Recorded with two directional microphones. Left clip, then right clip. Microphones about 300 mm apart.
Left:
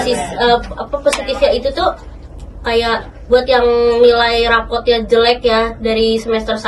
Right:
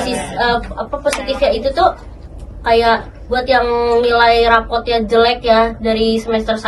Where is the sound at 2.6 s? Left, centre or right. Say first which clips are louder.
Right 3 dB; centre.